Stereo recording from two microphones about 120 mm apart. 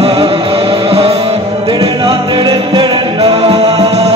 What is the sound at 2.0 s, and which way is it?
Music, 40° right (ahead or behind).